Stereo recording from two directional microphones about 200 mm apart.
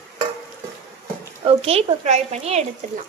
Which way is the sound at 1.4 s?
30° right (ahead or behind).